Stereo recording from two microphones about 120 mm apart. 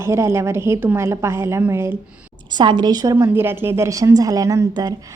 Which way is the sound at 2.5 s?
40° right (ahead or behind).